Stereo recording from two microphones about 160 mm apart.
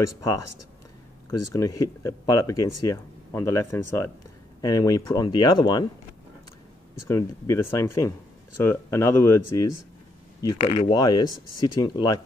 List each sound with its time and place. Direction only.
0.0 s speech: 20° left (ahead or behind)
1.4 s speech: 20° left (ahead or behind)
7.1 s speech: 15° left (ahead or behind)
10.6 s speech: 40° left (ahead or behind)
10.9 s speech: 25° left (ahead or behind)